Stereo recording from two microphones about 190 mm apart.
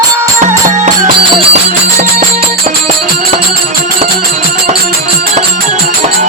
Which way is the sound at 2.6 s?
40° right (ahead or behind).